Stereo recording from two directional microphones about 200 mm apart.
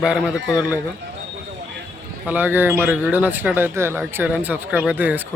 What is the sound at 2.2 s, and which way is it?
Speech, 10° right (ahead or behind).